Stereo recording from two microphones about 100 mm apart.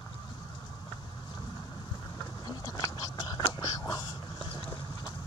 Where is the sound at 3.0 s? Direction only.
40° left (ahead or behind).